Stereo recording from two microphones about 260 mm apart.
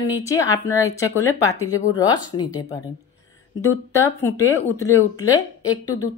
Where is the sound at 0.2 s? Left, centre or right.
Centre.